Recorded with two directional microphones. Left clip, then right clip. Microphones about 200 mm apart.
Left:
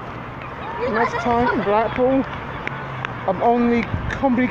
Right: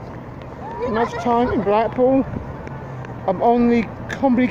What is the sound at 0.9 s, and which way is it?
Speech, 40° right (ahead or behind).